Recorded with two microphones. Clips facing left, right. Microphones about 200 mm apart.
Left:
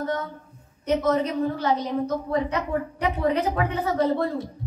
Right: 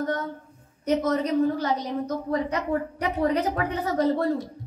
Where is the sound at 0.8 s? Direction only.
40° right (ahead or behind).